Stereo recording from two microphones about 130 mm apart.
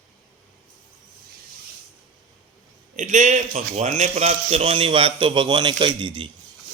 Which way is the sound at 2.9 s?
70° right (ahead or behind).